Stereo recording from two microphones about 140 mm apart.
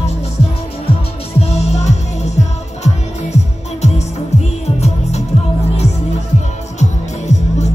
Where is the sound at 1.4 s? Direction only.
50° left (ahead or behind).